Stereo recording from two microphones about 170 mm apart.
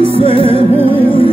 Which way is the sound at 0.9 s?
30° left (ahead or behind).